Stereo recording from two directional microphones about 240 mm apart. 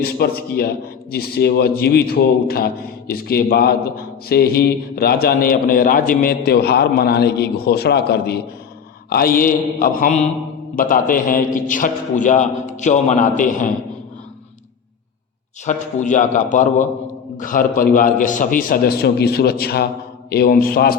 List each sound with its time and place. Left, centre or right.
0.0 s a man's voice: left
15.6 s a man's voice: left